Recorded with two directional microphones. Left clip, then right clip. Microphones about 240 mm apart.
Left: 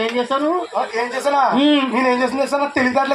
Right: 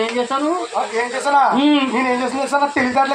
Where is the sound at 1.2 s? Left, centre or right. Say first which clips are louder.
Right 1 dB; left.